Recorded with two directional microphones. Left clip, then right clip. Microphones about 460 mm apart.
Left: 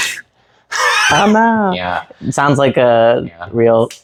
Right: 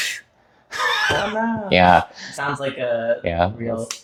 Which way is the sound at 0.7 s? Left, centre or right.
Centre.